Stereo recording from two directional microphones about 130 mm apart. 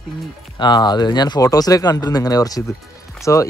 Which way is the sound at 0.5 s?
35° left (ahead or behind).